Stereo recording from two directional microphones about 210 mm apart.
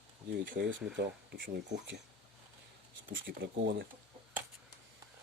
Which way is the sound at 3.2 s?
55° right (ahead or behind).